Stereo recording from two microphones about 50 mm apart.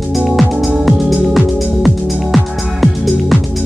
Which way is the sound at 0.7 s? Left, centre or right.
Centre.